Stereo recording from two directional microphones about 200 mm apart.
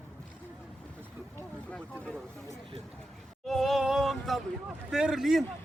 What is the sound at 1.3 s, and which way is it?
Vehicle, 10° left (ahead or behind).